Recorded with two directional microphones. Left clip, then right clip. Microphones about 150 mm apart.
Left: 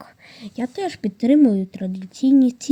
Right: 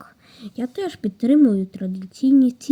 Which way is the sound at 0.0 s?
35° left (ahead or behind).